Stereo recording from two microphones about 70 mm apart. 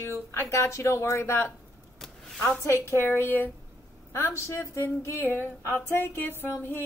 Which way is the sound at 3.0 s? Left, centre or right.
Left.